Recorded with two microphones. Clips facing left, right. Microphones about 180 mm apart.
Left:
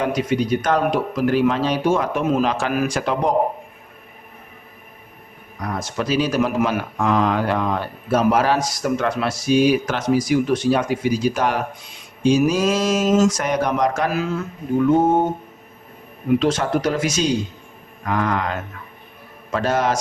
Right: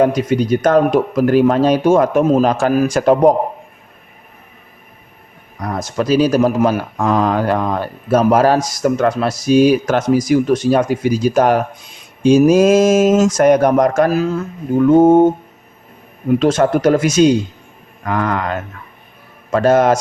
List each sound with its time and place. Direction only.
0.0 s speech: 45° right (ahead or behind)
5.6 s speech: 40° right (ahead or behind)
16.4 s speech: 50° right (ahead or behind)